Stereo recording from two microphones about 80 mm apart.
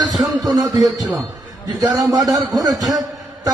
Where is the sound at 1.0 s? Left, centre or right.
Right.